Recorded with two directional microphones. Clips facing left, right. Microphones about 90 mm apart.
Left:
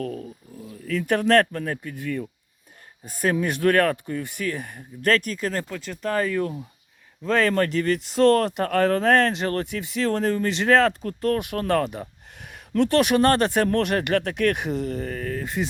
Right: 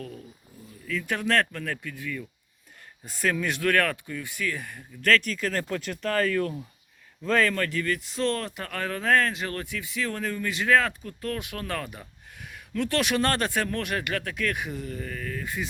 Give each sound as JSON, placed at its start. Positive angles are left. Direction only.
{"t": 0.0, "sound": "speech", "side_deg": 55}
{"t": 5.9, "sound": "speech", "side_deg": 20}
{"t": 7.3, "sound": "speech", "side_deg": 30}
{"t": 8.1, "sound": "speech", "side_deg": 50}
{"t": 14.8, "sound": "speech", "side_deg": 40}